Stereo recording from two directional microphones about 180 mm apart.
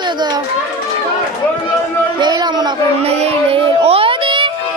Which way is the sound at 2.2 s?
25° right (ahead or behind).